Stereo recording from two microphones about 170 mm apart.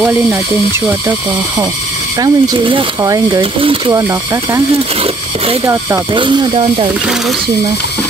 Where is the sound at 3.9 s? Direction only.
20° right (ahead or behind).